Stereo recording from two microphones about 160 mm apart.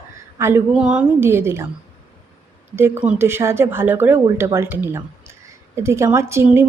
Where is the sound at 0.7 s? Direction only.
5° right (ahead or behind).